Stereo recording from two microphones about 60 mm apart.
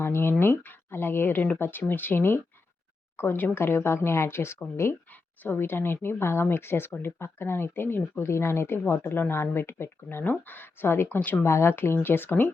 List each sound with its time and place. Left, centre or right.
0.0 s speech: left
5.4 s speech: left